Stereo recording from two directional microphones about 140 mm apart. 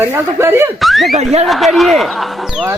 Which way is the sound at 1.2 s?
50° right (ahead or behind).